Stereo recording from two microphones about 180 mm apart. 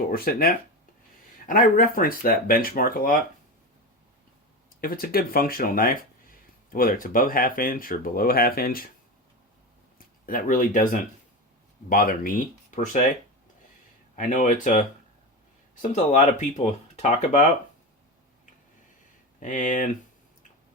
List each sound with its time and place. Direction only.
0.1 s speech: 55° left (ahead or behind)
4.8 s speech: 55° left (ahead or behind)
10.0 s speech: 50° left (ahead or behind)
14.2 s speech: 45° left (ahead or behind)
19.4 s speech: 45° left (ahead or behind)